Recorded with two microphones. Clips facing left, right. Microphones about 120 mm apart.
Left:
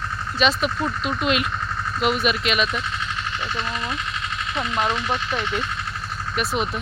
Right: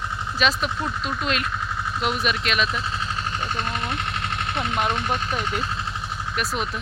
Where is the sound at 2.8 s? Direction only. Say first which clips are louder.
Right 1 dB; 35° right (ahead or behind).